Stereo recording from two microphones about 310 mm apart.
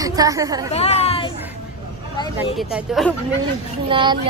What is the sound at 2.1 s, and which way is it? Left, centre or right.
Vehicle, centre.